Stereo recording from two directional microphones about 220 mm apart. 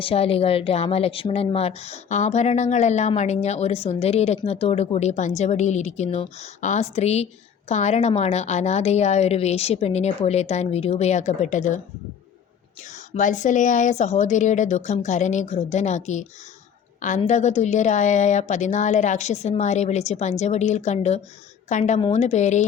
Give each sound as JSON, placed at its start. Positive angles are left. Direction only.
{"t": 0.0, "sound": "a woman's voice", "side_deg": 25}
{"t": 13.1, "sound": "a woman's voice", "side_deg": 35}